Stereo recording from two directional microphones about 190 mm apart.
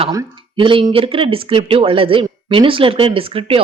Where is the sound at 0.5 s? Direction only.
25° right (ahead or behind).